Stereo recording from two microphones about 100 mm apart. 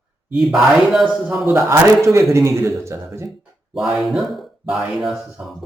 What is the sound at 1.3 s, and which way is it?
Speech, 20° right (ahead or behind).